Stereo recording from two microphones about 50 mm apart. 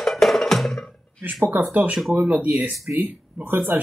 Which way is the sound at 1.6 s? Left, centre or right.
Right.